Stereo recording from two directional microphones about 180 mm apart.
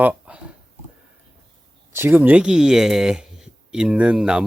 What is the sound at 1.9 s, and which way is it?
Speech, 10° right (ahead or behind).